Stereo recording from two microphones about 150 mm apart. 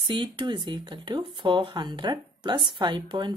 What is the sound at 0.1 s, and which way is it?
A woman's voice, 30° right (ahead or behind).